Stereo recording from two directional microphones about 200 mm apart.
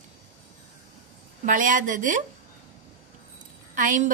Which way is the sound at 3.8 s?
40° right (ahead or behind).